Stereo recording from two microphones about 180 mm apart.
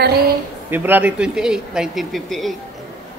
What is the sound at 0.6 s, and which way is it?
Speech, 10° right (ahead or behind).